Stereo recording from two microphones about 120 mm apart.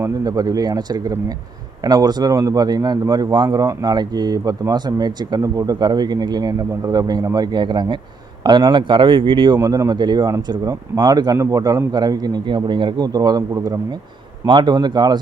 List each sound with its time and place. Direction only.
0.0 s speech: 30° right (ahead or behind)
9.6 s speech: 30° right (ahead or behind)
14.4 s speech: 40° right (ahead or behind)